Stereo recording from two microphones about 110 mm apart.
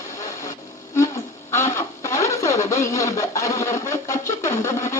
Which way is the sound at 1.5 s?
25° left (ahead or behind).